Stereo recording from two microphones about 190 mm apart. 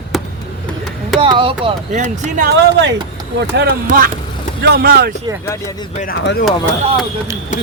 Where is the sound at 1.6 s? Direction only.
40° right (ahead or behind).